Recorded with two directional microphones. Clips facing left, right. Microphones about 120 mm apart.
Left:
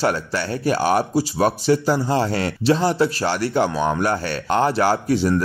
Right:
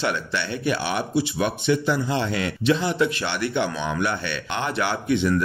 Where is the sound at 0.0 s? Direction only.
40° left (ahead or behind).